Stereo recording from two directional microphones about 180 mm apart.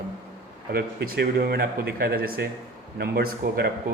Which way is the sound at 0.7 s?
60° right (ahead or behind).